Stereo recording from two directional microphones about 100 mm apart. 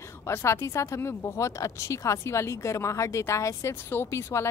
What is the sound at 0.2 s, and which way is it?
Speech, 25° left (ahead or behind).